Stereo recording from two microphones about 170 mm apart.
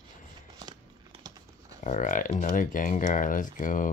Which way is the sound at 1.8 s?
50° left (ahead or behind).